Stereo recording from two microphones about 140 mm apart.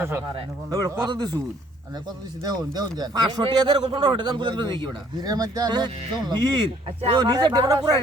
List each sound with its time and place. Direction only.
0.7 s speech: 25° right (ahead or behind)
2.4 s a man's voice: 25° right (ahead or behind)